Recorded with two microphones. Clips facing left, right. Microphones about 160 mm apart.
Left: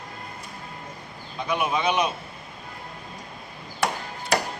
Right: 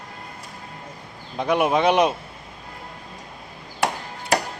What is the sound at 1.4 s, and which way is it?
Speech, 70° right (ahead or behind).